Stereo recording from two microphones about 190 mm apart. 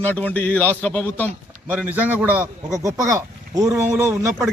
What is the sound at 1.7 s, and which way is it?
A man's voice, 10° right (ahead or behind).